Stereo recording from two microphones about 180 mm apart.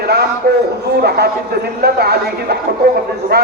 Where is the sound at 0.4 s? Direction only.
65° right (ahead or behind).